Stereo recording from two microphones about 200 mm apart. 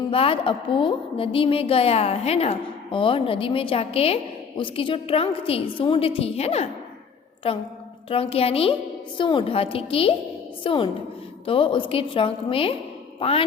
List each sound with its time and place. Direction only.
0.1 s a woman's voice: 25° left (ahead or behind)